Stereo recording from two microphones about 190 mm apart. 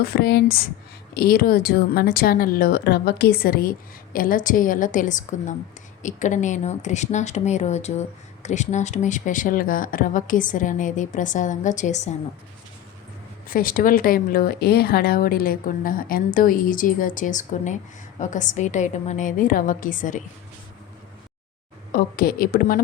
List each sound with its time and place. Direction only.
0.0 s a woman's voice: 55° left (ahead or behind); by 12.1 s 40° left (ahead or behind)
13.5 s a woman's voice: 50° left (ahead or behind)
21.9 s a woman's voice: 50° left (ahead or behind)